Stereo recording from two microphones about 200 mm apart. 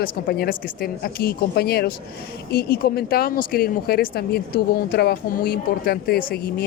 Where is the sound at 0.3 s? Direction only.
50° left (ahead or behind).